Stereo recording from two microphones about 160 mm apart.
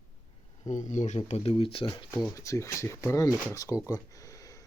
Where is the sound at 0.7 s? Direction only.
50° left (ahead or behind).